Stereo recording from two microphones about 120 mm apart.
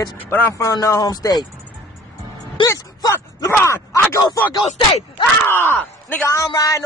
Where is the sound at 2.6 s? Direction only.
30° left (ahead or behind).